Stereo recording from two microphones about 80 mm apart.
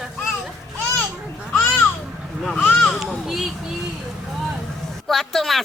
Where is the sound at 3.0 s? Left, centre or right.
Centre.